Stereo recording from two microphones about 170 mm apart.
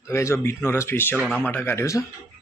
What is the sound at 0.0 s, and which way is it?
Speech, 15° left (ahead or behind).